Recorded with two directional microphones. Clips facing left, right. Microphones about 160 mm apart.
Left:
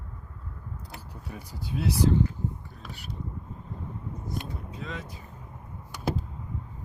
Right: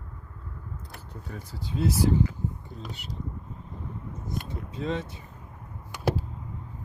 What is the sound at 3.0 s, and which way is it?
Speech, 20° right (ahead or behind).